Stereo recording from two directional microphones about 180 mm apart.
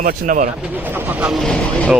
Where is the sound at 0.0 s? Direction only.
50° right (ahead or behind).